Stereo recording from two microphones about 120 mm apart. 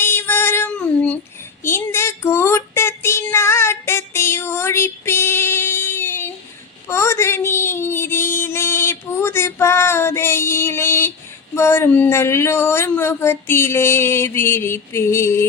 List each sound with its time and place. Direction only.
0.0 s female singing: 20° left (ahead or behind)
1.6 s child singing: 20° left (ahead or behind)
6.8 s a sound: 25° left (ahead or behind)